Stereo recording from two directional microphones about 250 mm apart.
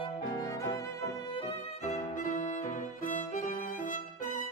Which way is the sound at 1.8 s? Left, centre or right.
Left.